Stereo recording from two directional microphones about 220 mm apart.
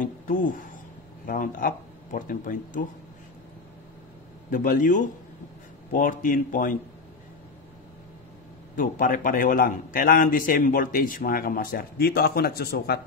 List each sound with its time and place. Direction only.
0.0 s speech: 35° left (ahead or behind)
4.5 s a man's voice: 35° left (ahead or behind)
8.7 s a man's voice: 40° left (ahead or behind)